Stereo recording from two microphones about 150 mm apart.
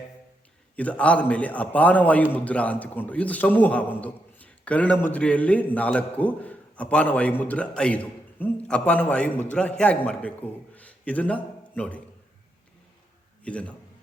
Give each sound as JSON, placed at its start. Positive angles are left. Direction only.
{"t": 0.8, "sound": "a man's voice", "side_deg": 10}
{"t": 13.4, "sound": "a man's voice", "side_deg": 10}